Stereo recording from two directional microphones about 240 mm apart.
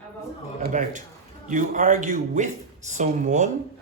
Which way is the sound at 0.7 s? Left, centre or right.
Right.